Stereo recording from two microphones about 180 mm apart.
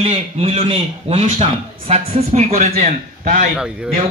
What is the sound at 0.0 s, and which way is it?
A man's voice, 30° right (ahead or behind).